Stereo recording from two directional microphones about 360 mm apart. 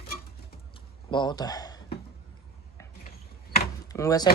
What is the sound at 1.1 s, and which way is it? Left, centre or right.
Speech, centre.